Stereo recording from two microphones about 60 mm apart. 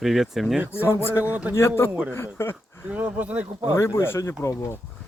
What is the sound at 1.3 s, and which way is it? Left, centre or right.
Speech, right.